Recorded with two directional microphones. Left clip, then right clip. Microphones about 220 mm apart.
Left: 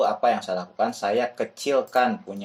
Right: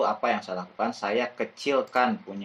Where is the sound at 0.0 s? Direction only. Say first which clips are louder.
Left 4 dB; 20° left (ahead or behind).